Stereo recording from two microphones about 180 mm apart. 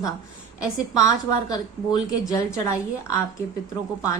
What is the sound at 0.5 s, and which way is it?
A woman's voice, 20° left (ahead or behind).